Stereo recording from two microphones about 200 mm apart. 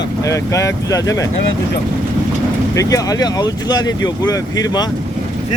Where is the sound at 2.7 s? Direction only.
15° left (ahead or behind).